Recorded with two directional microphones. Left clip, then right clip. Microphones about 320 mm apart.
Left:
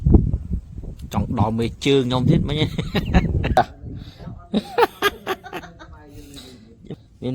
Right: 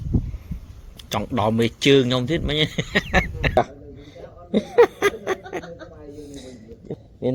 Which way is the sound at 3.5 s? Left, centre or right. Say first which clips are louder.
Left 4 dB; left.